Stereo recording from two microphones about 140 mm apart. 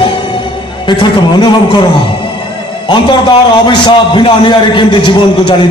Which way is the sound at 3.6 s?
35° left (ahead or behind).